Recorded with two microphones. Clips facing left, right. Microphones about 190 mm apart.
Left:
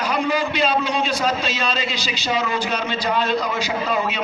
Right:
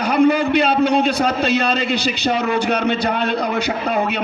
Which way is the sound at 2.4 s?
60° right (ahead or behind).